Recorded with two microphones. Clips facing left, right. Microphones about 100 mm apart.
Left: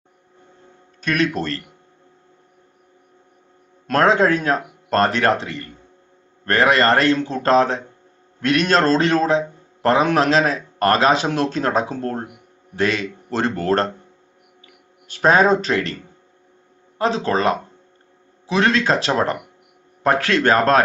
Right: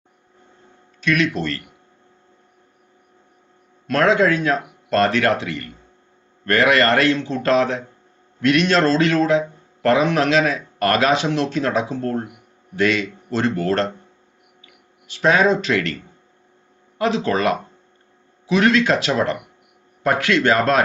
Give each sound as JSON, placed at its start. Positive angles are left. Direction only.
{"t": 1.0, "sound": "speech", "side_deg": 40}
{"t": 3.8, "sound": "a man's voice", "side_deg": 35}
{"t": 15.0, "sound": "speech", "side_deg": 40}
{"t": 17.0, "sound": "speech", "side_deg": 35}